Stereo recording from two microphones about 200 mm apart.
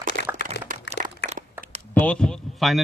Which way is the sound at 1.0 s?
40° right (ahead or behind).